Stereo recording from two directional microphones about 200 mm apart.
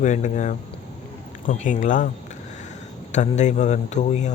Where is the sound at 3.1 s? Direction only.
35° left (ahead or behind).